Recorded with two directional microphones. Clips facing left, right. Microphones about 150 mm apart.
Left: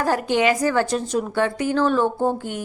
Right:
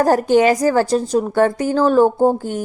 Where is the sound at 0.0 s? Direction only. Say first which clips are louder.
Right 6 dB; 40° right (ahead or behind).